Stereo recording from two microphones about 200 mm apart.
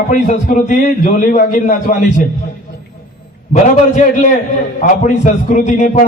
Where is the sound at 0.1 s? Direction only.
40° left (ahead or behind).